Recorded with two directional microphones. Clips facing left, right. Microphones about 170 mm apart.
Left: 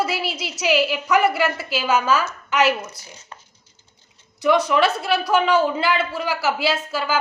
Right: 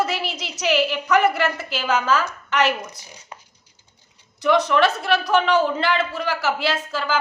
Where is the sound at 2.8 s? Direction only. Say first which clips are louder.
Left 1 dB; 15° right (ahead or behind).